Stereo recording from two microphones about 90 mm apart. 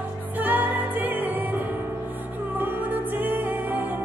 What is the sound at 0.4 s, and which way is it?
Music, 20° right (ahead or behind).